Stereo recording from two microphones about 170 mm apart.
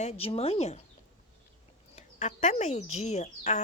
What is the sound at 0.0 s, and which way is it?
Speech, 35° left (ahead or behind).